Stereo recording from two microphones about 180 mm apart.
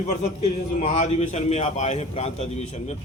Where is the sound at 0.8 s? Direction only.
40° left (ahead or behind).